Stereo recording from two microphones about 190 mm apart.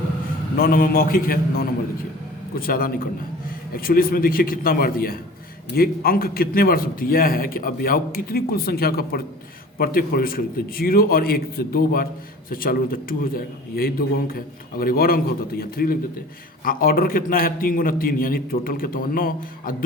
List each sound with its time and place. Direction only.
0.5 s a man's voice: 50° left (ahead or behind)